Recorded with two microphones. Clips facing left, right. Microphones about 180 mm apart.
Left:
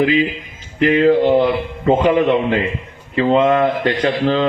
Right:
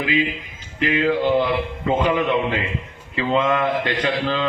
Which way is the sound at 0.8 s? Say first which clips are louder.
Left 7 dB; 35° left (ahead or behind).